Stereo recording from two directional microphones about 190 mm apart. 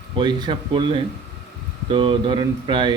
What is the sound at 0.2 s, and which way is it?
Speech, 25° right (ahead or behind).